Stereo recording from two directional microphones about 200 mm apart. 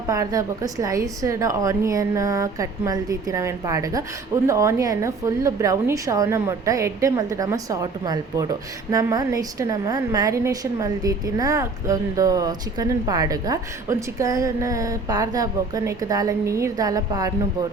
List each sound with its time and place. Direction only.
0.1 s a woman's voice: 15° right (ahead or behind)